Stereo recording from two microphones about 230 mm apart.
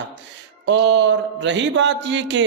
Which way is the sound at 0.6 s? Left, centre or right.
Right.